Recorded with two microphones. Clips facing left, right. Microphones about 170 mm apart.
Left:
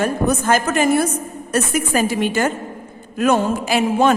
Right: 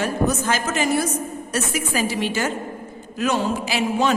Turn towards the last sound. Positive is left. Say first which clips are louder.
# left 5 dB
turn(degrees=50)  # may be behind; listen again after turning